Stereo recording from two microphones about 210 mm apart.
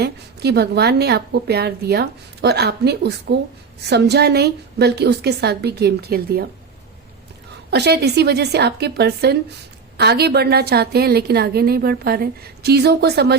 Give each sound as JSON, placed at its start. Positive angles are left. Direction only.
{"t": 0.0, "sound": "a woman's voice", "side_deg": -50}
{"t": 7.7, "sound": "a woman's voice", "side_deg": -50}